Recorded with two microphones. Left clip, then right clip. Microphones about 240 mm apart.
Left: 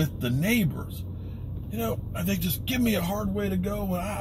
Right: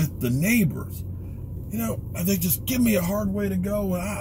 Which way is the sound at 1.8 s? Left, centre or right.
Centre.